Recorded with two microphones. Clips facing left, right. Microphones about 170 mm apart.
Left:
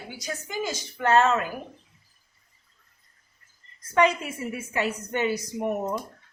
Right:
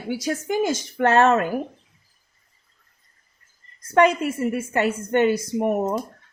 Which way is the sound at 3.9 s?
55° right (ahead or behind).